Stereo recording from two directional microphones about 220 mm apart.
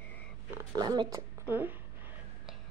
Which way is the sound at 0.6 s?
15° right (ahead or behind).